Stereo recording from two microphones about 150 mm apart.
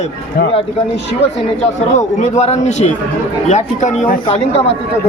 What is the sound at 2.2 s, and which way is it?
Speech, 50° left (ahead or behind).